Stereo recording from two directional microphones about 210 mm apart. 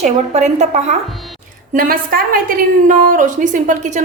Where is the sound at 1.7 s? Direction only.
45° right (ahead or behind).